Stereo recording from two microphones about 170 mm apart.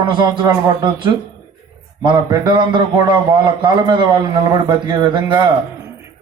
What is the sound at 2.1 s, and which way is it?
A man's voice, 25° right (ahead or behind).